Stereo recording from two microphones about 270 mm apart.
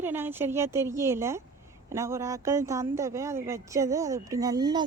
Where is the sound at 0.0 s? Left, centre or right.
Centre.